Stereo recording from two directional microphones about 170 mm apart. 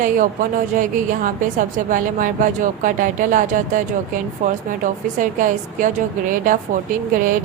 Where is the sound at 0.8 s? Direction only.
50° right (ahead or behind).